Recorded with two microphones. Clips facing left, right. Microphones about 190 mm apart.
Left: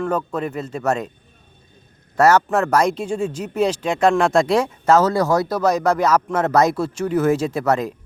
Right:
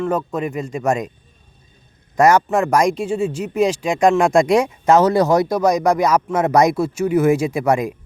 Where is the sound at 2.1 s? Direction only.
10° right (ahead or behind).